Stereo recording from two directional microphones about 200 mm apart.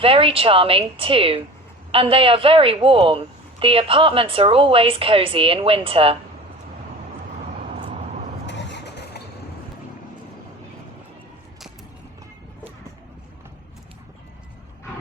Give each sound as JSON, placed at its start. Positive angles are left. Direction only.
{"t": 0.0, "sound": "a woman's voice", "side_deg": -25}
{"t": 8.4, "sound": "vehicle", "side_deg": 60}